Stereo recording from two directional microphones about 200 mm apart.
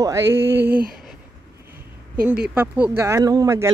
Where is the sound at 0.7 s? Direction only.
45° right (ahead or behind).